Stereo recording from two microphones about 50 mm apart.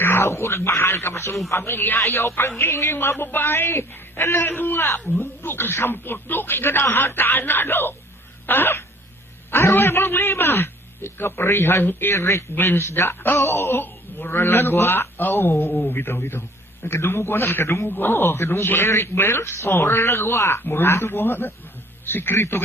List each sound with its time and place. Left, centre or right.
0.0 s speech: left
1.5 s speech: left
2.6 s speech: left
9.5 s a sound: left
9.7 s speech: left
11.8 s speech: left
12.1 s speech: left
12.5 s speech: left
17.8 s speech: left
20.6 s speech: left